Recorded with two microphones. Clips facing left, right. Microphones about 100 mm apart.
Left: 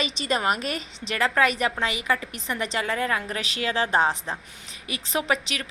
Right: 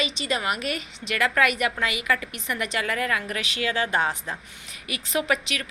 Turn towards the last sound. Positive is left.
turn(degrees=30)  # may be behind; listen again after turning